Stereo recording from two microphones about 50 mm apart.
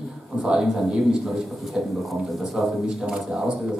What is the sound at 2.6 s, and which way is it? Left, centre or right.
Speech, centre.